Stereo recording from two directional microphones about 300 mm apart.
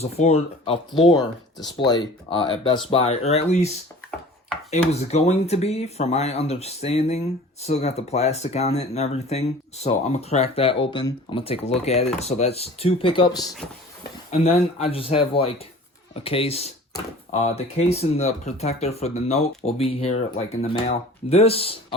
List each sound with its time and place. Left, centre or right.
0.0 s speech: left